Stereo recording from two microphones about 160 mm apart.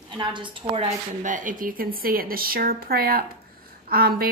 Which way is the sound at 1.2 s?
55° right (ahead or behind).